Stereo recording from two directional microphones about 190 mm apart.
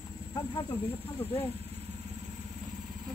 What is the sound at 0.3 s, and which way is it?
Speech, 20° left (ahead or behind).